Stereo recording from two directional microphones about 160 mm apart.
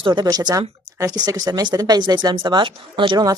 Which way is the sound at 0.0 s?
30° right (ahead or behind).